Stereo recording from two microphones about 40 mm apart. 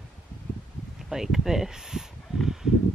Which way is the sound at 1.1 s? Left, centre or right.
Centre.